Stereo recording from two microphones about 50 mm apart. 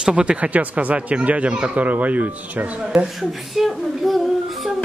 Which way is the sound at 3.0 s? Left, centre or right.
Centre.